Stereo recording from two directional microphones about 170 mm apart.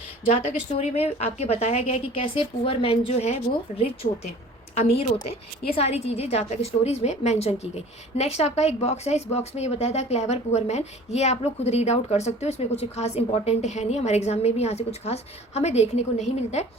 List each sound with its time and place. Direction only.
0.4 s a woman's voice: 40° left (ahead or behind)